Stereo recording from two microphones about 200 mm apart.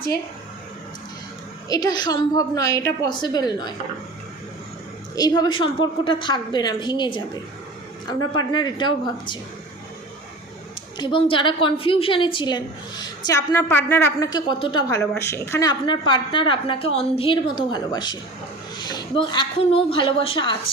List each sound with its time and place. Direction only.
1.7 s a woman's voice: 20° left (ahead or behind)
5.1 s a woman's voice: 20° left (ahead or behind)
10.9 s a woman's voice: 25° left (ahead or behind)